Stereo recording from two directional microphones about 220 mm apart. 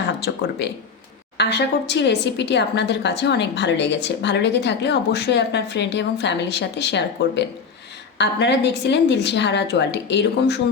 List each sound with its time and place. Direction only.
1.4 s a woman's voice: 50° left (ahead or behind)